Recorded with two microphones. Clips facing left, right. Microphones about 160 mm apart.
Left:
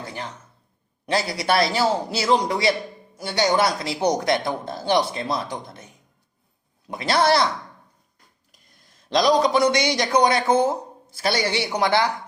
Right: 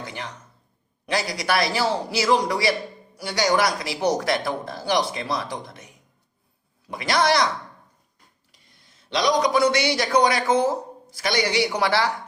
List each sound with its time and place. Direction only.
0.0 s speech: 30° left (ahead or behind)
9.0 s speech: 30° left (ahead or behind)